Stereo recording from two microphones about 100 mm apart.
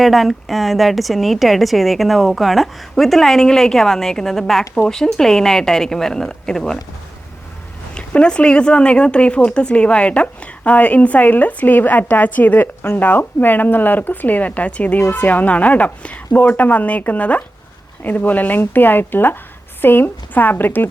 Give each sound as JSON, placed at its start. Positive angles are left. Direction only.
{"t": 0.0, "sound": "a woman's voice", "side_deg": 0}
{"t": 7.9, "sound": "speech", "side_deg": 10}